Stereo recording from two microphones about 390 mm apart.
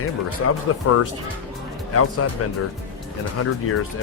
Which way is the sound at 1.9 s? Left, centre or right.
Left.